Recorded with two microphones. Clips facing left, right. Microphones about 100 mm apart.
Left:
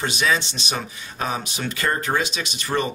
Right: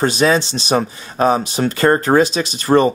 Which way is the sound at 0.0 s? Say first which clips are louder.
Right 8 dB; 35° right (ahead or behind).